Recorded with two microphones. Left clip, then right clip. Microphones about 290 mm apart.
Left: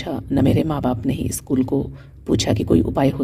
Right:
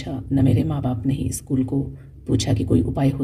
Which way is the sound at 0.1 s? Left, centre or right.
Left.